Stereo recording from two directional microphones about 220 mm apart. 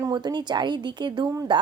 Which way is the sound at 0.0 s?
20° right (ahead or behind).